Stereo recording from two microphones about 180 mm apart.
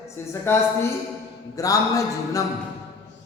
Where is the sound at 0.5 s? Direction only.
15° left (ahead or behind).